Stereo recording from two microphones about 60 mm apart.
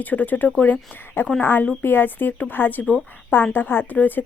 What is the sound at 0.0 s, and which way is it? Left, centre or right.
A woman's voice, left.